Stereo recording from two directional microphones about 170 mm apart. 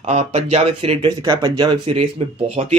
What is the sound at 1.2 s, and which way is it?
Speech, 25° right (ahead or behind).